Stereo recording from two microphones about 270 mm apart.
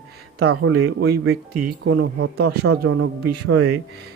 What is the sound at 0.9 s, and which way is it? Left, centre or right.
Speech, right.